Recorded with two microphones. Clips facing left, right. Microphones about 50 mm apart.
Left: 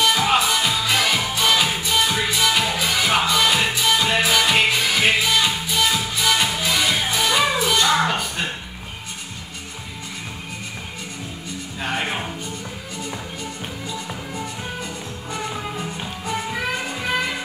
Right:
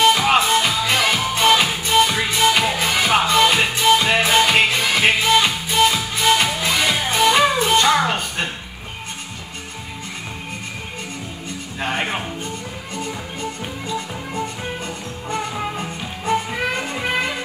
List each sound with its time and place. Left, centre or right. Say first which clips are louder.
0.0 s music: right 3 dB; right
11.8 s music: right 2 dB; right